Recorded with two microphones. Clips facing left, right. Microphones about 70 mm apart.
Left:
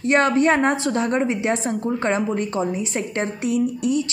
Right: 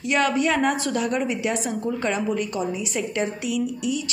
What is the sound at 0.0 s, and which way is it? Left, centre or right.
A woman's voice, left.